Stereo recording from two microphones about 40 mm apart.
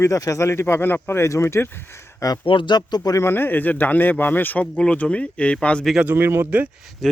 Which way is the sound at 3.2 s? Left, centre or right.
Left.